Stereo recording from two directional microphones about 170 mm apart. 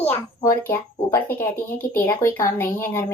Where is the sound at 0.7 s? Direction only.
15° left (ahead or behind).